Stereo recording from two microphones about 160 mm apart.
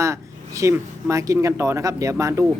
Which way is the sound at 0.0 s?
20° right (ahead or behind).